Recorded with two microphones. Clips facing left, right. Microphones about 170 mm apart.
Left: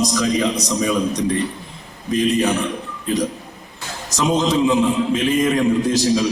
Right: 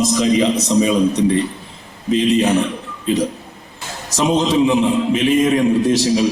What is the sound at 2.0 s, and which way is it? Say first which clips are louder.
Speech: right 3 dB; 20° right (ahead or behind).